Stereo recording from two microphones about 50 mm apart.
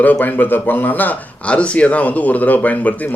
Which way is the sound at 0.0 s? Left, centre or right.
Left.